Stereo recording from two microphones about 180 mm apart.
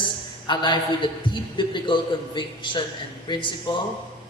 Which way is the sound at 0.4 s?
25° left (ahead or behind).